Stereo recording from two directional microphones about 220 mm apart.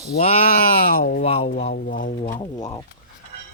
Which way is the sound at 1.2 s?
25° left (ahead or behind).